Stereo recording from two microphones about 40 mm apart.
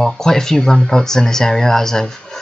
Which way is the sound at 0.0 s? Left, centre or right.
Centre.